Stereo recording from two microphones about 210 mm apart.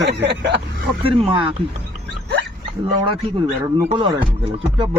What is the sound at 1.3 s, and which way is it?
Speech, 25° right (ahead or behind).